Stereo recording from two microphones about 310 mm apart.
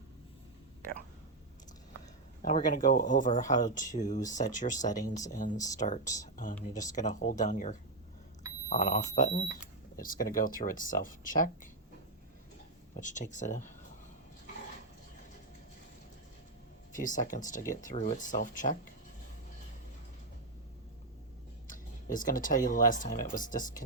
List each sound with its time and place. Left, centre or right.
2.4 s speech: left
5.5 s speech: centre
5.8 s speech: left
6.6 s speech: centre
6.9 s speech: left
13.0 s speech: left
16.9 s speech: left
21.7 s a sound: left
22.7 s speech: left